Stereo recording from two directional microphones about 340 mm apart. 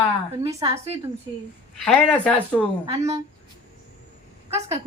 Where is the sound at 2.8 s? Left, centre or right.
Centre.